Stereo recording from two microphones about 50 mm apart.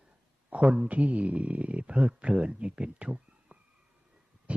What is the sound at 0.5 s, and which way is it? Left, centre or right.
Speech, right.